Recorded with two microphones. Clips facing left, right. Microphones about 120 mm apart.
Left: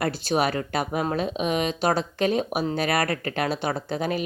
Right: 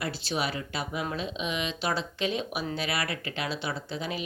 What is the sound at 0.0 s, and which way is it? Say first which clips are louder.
Speech: left 8 dB; 50° left (ahead or behind).